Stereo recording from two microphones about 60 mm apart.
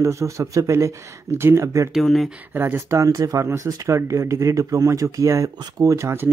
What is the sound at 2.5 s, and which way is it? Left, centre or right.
Speech, right.